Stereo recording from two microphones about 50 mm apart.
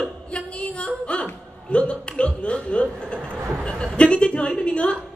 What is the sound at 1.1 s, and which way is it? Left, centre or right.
A woman's voice, left.